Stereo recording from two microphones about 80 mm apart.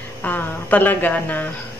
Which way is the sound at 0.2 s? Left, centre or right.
Left.